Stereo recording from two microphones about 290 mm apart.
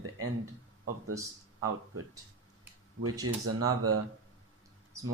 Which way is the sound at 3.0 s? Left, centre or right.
Right.